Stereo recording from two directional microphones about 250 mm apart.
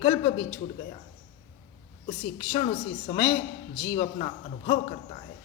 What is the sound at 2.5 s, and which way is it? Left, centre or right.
A woman's voice, left.